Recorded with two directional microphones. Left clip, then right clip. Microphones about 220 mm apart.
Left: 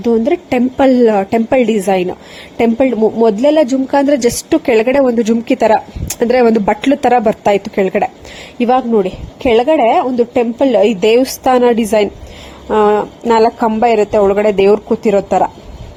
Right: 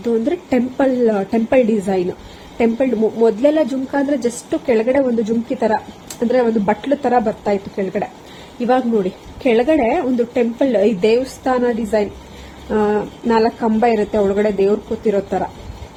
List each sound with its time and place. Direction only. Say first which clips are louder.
0.0 s speech: left 6 dB; 30° left (ahead or behind)
9.4 s a woman's voice: left 5 dB; 30° left (ahead or behind)